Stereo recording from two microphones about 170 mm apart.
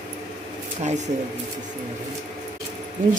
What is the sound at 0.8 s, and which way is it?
Speech, 45° right (ahead or behind).